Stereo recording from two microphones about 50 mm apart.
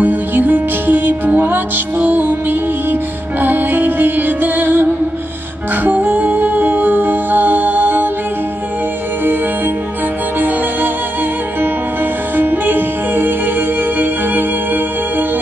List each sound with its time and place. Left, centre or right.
0.0 s music: right
5.9 s music: right
11.6 s music: right